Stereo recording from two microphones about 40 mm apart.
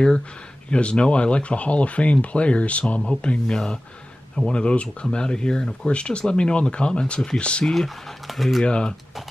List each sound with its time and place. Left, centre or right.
0.7 s speech: left
7.3 s speech: left
7.6 s speech: centre
8.3 s speech: centre
8.6 s speech: left